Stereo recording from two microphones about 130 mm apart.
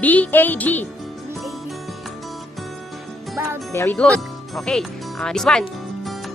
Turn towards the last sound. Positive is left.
turn(degrees=0)  # may be behind; listen again after turning